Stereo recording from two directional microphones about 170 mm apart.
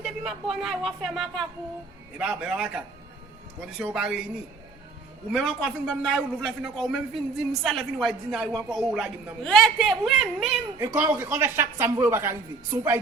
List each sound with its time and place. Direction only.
0.0 s a man's voice: 5° right (ahead or behind)
5.3 s a man's voice: 5° left (ahead or behind)
10.8 s speech: 15° right (ahead or behind)